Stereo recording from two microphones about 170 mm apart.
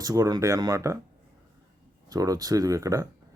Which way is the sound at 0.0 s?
20° right (ahead or behind).